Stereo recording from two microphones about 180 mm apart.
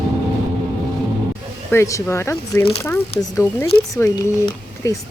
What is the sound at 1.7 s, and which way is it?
Speech, 15° left (ahead or behind).